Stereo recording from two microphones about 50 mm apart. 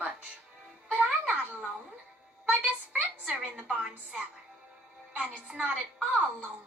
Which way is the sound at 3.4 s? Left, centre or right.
Right.